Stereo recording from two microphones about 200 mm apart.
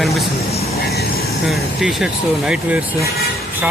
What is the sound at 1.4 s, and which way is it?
Speech, centre (ahead or behind).